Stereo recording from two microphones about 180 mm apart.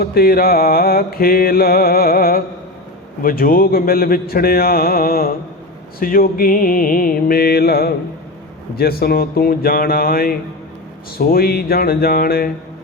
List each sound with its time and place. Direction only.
0.0 s mantra: 55° left (ahead or behind)